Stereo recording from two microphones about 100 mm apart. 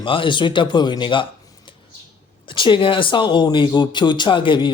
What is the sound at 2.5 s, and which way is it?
Speech, 55° left (ahead or behind).